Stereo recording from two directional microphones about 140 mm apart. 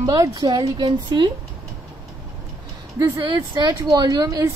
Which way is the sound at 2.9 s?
35° right (ahead or behind).